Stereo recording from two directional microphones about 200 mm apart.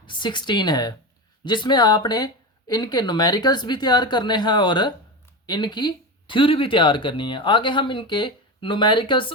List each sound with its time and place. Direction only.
0.0 s speech: 25° left (ahead or behind)